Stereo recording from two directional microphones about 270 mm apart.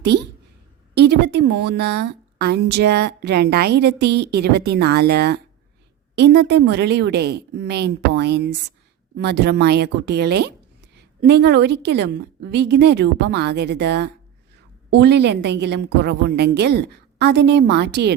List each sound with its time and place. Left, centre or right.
0.9 s speech: right